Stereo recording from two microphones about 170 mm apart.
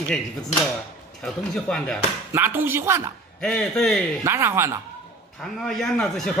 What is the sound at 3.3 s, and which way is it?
Speech, 5° left (ahead or behind).